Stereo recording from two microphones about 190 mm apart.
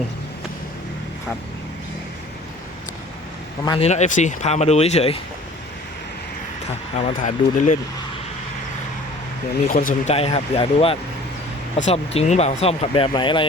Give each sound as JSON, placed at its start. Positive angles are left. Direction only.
{"t": 3.7, "sound": "speech", "side_deg": 35}
{"t": 6.9, "sound": "speech", "side_deg": 40}
{"t": 9.6, "sound": "speech", "side_deg": 45}
{"t": 10.2, "sound": "speech", "side_deg": 30}